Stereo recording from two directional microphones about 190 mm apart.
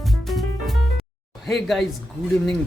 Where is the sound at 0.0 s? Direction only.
Centre (ahead or behind).